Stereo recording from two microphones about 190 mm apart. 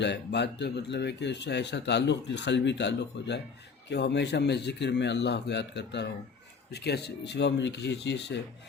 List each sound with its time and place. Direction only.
0.0 s speech: 65° left (ahead or behind)